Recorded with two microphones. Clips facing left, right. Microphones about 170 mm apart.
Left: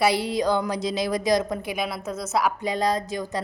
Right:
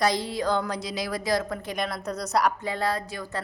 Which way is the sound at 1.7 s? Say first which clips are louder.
Left 1 dB; 5° left (ahead or behind).